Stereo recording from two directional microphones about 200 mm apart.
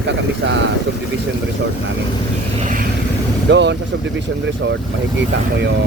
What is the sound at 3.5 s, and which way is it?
Speech, 60° right (ahead or behind).